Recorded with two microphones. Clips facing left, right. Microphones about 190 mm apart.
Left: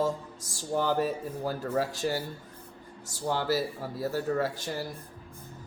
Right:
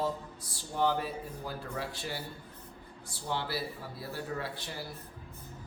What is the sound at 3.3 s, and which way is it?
Speech, 45° left (ahead or behind).